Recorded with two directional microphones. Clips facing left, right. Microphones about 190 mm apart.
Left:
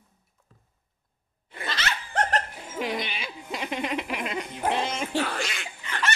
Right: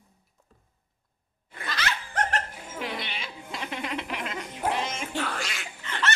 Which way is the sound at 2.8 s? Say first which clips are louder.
Left 5 dB; 15° left (ahead or behind).